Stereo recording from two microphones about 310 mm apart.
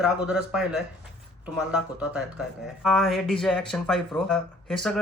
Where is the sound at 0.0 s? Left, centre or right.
Centre.